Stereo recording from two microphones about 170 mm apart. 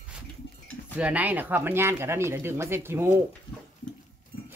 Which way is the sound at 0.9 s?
10° right (ahead or behind).